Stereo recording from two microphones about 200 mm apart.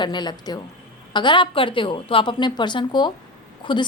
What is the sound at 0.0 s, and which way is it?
A woman's voice, 20° left (ahead or behind).